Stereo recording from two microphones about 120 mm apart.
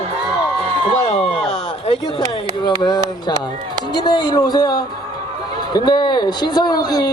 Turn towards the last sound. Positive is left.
turn(degrees=35)  # may be behind; listen again after turning